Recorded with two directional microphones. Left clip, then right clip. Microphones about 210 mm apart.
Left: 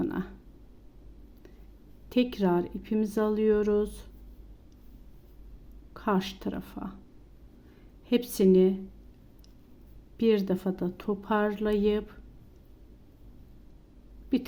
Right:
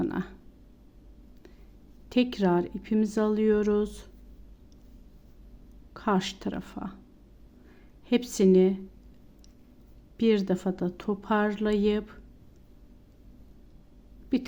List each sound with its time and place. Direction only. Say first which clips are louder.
0.0 s speech: right 1 dB; 5° right (ahead or behind)
2.0 s speech: right 1 dB; 5° right (ahead or behind)
5.9 s speech: right 1 dB; 5° right (ahead or behind)
8.0 s speech: right 1 dB; 5° right (ahead or behind)
10.2 s speech: even; 5° right (ahead or behind)
14.3 s speech: even; 5° right (ahead or behind)